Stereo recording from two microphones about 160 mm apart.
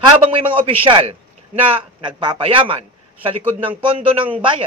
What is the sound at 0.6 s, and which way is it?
A man's voice, 35° right (ahead or behind).